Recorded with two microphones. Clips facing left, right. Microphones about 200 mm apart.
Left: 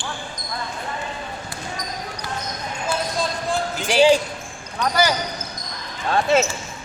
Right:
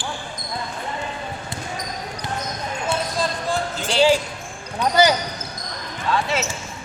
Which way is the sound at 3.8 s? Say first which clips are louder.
Left 2 dB; 15° left (ahead or behind).